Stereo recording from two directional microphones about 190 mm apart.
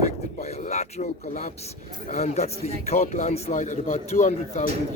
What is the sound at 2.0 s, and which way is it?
A man's voice, 35° left (ahead or behind).